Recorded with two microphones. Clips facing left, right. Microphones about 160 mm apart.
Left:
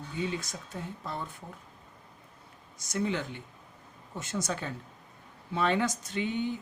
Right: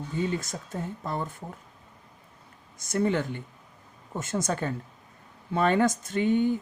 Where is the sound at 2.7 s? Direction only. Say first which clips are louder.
Right 5 dB; 55° right (ahead or behind).